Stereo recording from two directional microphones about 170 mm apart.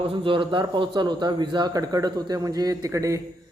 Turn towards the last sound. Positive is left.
turn(degrees=-20)  # may be behind; listen again after turning